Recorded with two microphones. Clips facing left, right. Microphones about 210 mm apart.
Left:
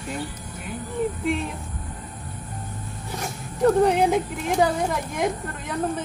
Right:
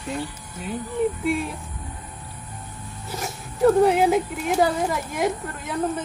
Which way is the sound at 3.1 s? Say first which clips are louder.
Right 1 dB; 5° right (ahead or behind).